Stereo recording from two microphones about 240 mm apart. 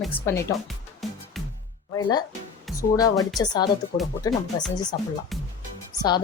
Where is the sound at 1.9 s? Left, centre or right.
Centre.